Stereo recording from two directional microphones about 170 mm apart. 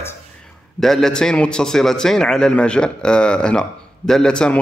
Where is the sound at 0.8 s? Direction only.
Centre (ahead or behind).